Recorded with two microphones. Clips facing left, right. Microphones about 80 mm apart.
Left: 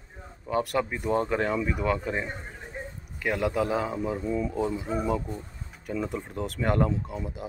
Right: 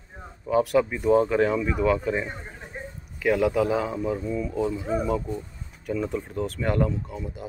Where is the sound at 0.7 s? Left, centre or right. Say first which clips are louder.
Right 8 dB; centre.